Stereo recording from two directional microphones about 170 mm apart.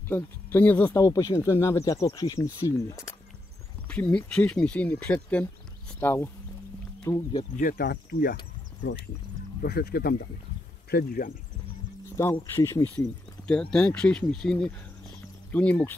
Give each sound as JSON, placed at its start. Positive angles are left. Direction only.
{"t": 0.1, "sound": "speech", "side_deg": 10}
{"t": 7.5, "sound": "speech", "side_deg": 55}
{"t": 9.6, "sound": "speech", "side_deg": 65}
{"t": 12.2, "sound": "speech", "side_deg": 15}
{"t": 13.5, "sound": "speech", "side_deg": 5}